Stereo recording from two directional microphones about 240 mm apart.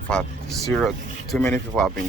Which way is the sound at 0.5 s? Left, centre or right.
Centre.